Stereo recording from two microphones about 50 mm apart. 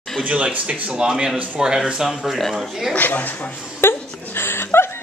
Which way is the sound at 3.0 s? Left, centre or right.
Left.